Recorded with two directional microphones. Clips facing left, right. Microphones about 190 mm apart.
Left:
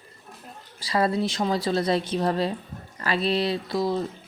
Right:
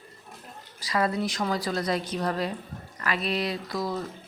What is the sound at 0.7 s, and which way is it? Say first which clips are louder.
Speech: left 3 dB; 30° left (ahead or behind).